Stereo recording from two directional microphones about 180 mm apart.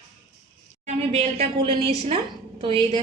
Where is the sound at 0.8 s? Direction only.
35° right (ahead or behind).